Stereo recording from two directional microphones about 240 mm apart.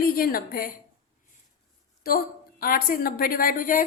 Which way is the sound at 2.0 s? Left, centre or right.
Left.